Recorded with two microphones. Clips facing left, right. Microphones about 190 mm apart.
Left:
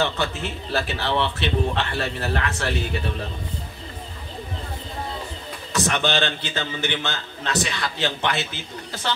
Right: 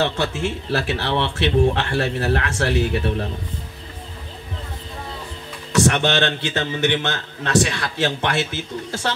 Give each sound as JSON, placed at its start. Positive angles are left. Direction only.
{"t": 0.0, "sound": "speech", "side_deg": -75}
{"t": 5.9, "sound": "speech", "side_deg": -65}